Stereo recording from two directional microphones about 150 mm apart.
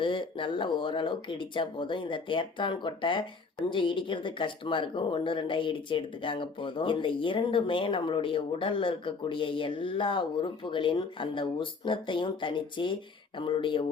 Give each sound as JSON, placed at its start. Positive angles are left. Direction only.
{"t": 0.0, "sound": "speech", "side_deg": 35}